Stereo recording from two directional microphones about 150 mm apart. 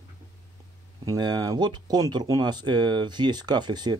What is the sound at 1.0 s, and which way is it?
Speech, 25° right (ahead or behind).